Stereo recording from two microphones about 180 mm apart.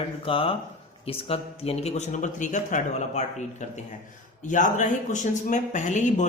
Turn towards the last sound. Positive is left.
turn(degrees=40)  # may be behind; listen again after turning